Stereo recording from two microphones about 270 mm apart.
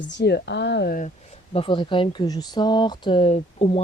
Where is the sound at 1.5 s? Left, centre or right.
Centre.